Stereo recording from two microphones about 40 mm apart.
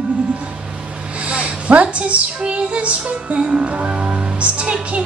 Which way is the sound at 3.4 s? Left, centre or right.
Right.